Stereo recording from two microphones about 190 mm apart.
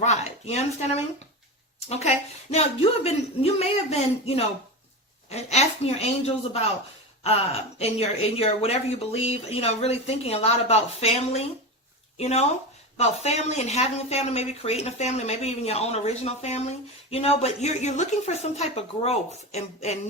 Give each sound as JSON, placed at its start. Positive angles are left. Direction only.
{"t": 0.0, "sound": "a sound", "side_deg": 35}
{"t": 1.9, "sound": "speech", "side_deg": 35}
{"t": 7.8, "sound": "speech", "side_deg": 30}